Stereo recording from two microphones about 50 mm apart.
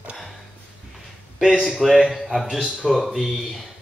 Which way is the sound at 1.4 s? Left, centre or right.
Centre.